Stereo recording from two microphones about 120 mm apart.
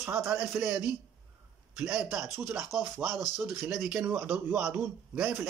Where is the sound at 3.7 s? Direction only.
10° right (ahead or behind).